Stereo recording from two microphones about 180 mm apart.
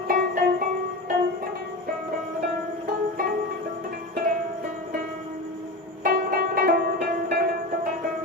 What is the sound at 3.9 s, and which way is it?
Music, 50° right (ahead or behind).